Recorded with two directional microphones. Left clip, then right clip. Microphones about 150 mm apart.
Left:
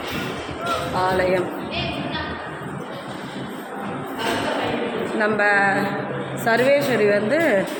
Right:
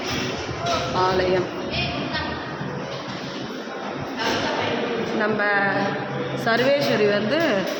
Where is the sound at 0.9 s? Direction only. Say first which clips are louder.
Left 1 dB; 10° left (ahead or behind).